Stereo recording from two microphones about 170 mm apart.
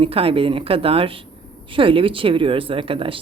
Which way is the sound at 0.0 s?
35° right (ahead or behind).